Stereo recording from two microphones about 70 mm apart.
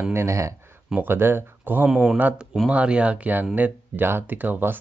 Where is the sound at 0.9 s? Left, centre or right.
Right.